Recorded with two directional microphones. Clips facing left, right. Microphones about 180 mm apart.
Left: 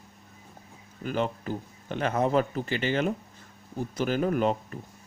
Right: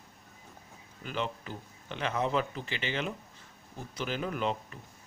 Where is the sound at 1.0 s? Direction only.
45° left (ahead or behind).